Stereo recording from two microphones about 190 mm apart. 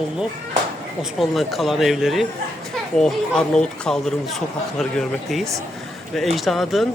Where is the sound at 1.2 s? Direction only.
Centre (ahead or behind).